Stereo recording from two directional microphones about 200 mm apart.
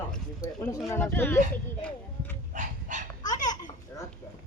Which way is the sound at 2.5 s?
40° right (ahead or behind).